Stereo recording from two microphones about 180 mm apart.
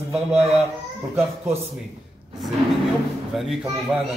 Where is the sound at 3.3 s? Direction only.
Centre (ahead or behind).